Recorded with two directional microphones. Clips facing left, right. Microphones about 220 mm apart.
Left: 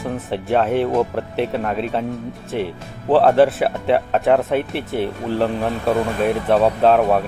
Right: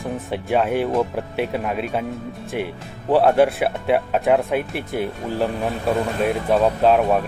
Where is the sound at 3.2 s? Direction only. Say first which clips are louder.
Left 2 dB; centre (ahead or behind).